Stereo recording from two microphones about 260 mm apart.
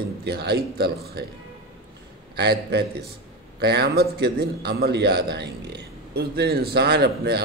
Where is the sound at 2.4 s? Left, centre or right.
Right.